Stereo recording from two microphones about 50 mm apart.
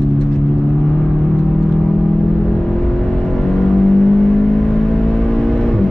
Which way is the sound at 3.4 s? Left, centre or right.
Centre.